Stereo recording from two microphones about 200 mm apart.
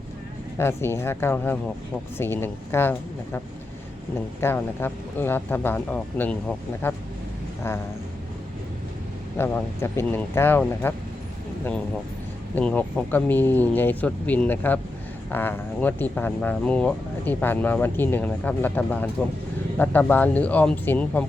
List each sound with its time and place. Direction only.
0.6 s speech: 10° left (ahead or behind)
9.4 s speech: 10° left (ahead or behind)
12.5 s speech: 5° left (ahead or behind)